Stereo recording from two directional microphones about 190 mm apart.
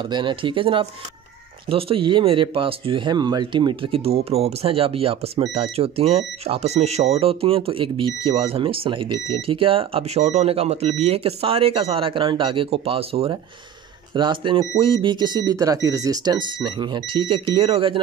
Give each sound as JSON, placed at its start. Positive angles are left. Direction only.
{"t": 0.0, "sound": "speech", "side_deg": -25}